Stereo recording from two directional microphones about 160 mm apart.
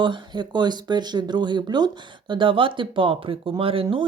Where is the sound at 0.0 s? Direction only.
30° right (ahead or behind).